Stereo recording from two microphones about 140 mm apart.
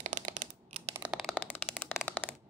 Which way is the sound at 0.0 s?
60° right (ahead or behind).